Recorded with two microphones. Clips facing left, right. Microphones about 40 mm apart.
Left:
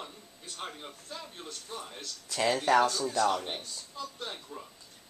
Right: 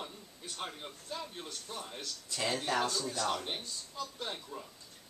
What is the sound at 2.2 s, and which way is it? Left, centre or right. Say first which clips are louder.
Speech: left 7 dB; left.